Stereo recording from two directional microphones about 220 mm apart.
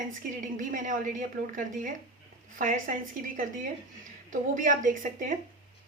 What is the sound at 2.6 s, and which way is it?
Speech, 35° right (ahead or behind).